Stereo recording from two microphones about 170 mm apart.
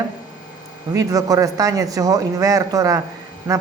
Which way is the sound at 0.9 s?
20° right (ahead or behind).